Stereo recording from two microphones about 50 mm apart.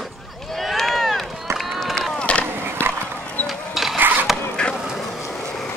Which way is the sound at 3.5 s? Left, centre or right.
Centre.